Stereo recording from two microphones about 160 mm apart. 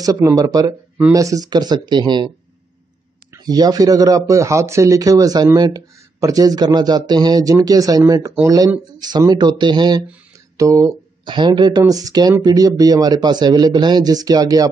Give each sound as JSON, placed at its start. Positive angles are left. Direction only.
{"t": 0.0, "sound": "speech", "side_deg": -20}